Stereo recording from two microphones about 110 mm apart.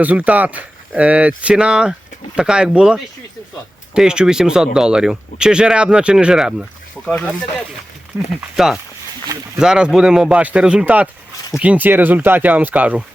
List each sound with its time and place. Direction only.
0.0 s speech: 15° right (ahead or behind)
7.0 s speech: 10° left (ahead or behind)
8.1 s speech: 20° right (ahead or behind)
8.5 s speech: 5° right (ahead or behind)